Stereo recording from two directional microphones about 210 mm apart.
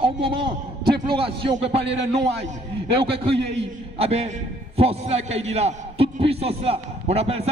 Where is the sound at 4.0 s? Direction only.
30° right (ahead or behind).